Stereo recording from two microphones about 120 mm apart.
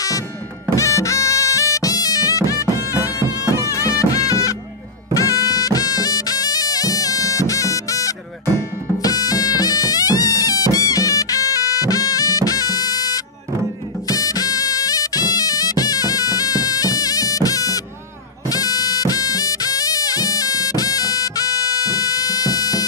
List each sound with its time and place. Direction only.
0.7 s music: 25° left (ahead or behind)